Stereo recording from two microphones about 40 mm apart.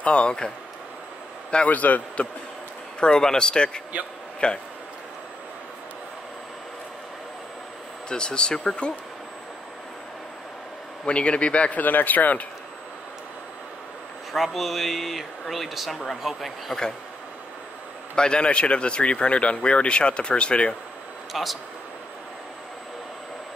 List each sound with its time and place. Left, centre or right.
0.0 s speech: left
1.7 s speech: left
3.0 s speech: centre
8.1 s speech: left
11.1 s speech: left
11.8 s speech: left
14.3 s speech: centre
18.1 s speech: left
21.3 s speech: centre